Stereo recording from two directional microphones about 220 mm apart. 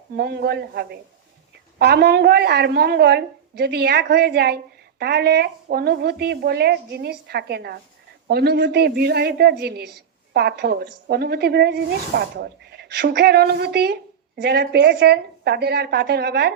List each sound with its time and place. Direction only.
0.2 s a woman's voice: 45° right (ahead or behind)